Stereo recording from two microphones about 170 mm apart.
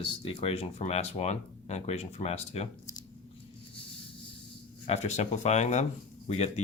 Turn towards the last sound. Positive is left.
turn(degrees=40)  # may be behind; listen again after turning